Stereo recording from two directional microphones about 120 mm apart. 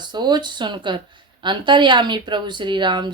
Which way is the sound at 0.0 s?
35° right (ahead or behind).